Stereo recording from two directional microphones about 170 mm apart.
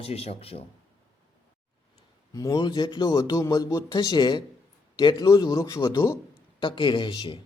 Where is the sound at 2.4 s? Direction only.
20° left (ahead or behind).